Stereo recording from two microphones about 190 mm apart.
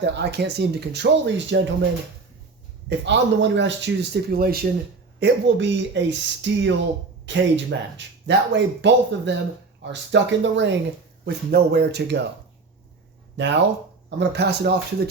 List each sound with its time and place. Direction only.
0.0 s speech: 60° right (ahead or behind)
3.0 s speech: 70° right (ahead or behind); by 4.6 s 55° right (ahead or behind)
5.2 s speech: 65° right (ahead or behind)
11.3 s speech: 60° right (ahead or behind)
13.3 s speech: 70° right (ahead or behind)